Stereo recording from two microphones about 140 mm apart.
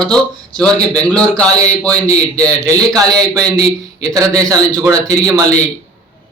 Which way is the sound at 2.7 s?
25° right (ahead or behind).